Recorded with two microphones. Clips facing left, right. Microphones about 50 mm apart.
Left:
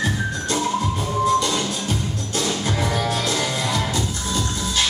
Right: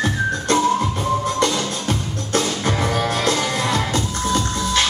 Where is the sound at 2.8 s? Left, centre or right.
Right.